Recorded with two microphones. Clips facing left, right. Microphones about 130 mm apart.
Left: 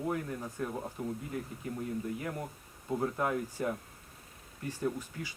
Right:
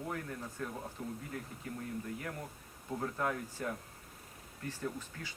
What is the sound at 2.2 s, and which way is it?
Speech, 20° left (ahead or behind).